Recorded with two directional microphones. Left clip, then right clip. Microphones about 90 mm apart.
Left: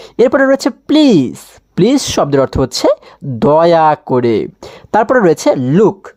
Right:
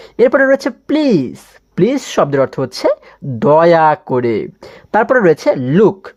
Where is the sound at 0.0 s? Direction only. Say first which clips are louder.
Left 1 dB; 30° left (ahead or behind).